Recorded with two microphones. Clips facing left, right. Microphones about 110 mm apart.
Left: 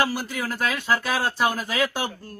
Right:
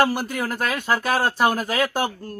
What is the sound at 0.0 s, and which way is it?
Speech, 50° right (ahead or behind).